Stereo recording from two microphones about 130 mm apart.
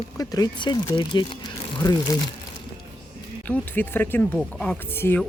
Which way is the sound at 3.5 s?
15° left (ahead or behind).